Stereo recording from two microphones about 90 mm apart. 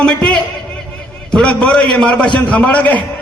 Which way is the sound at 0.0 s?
15° left (ahead or behind).